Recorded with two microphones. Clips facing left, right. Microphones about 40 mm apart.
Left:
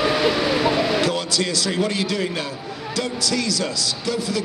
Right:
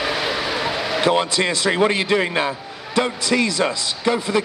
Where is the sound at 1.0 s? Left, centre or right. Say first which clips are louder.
Right 4 dB; right.